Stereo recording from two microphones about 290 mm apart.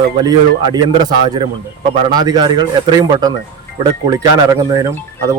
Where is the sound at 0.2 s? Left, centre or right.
Centre.